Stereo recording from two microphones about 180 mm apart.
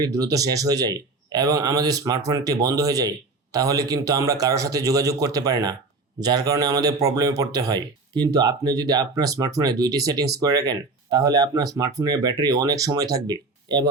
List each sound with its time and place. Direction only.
0.0 s speech: 20° right (ahead or behind)